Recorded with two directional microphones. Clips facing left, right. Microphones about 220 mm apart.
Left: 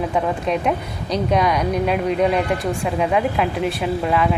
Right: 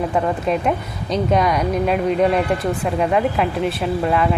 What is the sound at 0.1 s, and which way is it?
Speech, centre (ahead or behind).